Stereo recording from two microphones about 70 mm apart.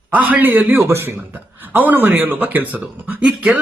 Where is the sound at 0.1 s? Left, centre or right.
Right.